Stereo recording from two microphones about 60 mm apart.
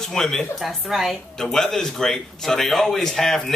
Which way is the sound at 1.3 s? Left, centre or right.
Centre.